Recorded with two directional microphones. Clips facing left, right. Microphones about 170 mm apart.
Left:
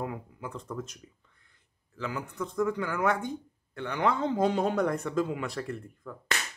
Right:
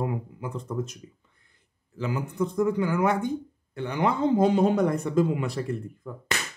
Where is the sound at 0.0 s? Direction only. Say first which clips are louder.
Right 5 dB; 15° right (ahead or behind).